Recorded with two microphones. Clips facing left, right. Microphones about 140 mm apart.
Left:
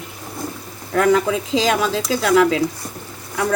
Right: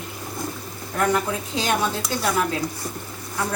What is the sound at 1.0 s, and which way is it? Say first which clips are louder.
Speech: left 6 dB; 90° left.